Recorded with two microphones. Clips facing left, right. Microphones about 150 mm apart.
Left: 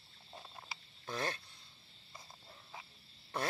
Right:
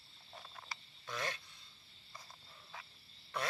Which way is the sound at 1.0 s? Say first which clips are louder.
Left 3 dB; 30° left (ahead or behind).